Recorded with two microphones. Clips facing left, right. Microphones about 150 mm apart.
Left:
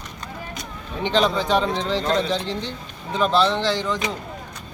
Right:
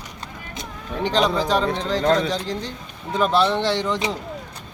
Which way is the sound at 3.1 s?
10° right (ahead or behind).